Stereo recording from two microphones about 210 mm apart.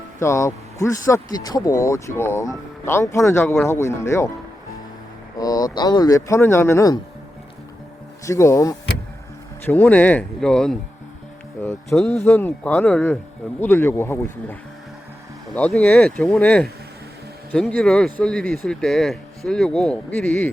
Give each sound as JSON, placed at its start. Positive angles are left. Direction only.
{"t": 0.2, "sound": "speech", "side_deg": 15}
{"t": 5.4, "sound": "speech", "side_deg": 15}
{"t": 8.2, "sound": "speech", "side_deg": 15}
{"t": 11.6, "sound": "cattle", "side_deg": 10}
{"t": 11.9, "sound": "speech", "side_deg": 0}